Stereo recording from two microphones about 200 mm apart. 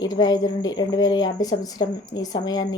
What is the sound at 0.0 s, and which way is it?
A woman's voice, 20° left (ahead or behind).